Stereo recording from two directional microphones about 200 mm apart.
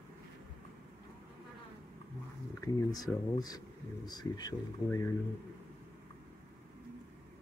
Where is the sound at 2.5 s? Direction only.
20° left (ahead or behind).